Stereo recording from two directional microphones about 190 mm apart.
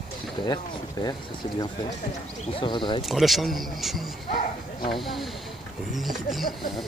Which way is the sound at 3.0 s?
Centre (ahead or behind).